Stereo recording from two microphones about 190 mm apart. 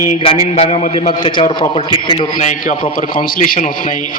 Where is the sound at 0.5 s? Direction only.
30° left (ahead or behind).